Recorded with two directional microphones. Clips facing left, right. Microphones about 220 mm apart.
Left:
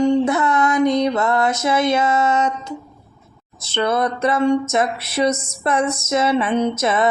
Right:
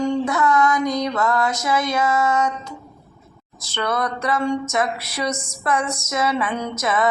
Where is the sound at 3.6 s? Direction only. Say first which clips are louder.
Left 5 dB; 25° left (ahead or behind).